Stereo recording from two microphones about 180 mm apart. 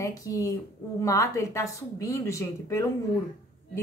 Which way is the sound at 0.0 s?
20° left (ahead or behind).